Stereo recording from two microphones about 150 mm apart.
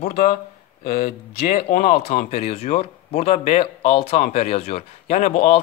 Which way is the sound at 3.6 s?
40° left (ahead or behind).